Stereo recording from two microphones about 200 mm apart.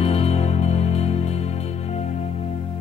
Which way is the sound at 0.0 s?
30° left (ahead or behind).